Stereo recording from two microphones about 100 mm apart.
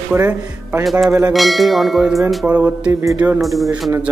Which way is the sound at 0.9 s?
Centre (ahead or behind).